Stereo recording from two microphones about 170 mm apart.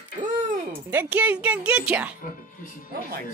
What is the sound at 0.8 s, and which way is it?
A woman's voice, 10° right (ahead or behind).